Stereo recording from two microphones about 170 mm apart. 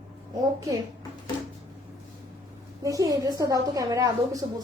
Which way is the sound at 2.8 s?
20° right (ahead or behind).